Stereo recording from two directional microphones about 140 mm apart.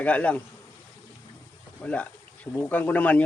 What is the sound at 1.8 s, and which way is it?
Speech, 10° left (ahead or behind).